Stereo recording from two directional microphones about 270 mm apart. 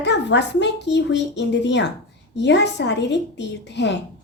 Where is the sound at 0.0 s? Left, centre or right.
Left.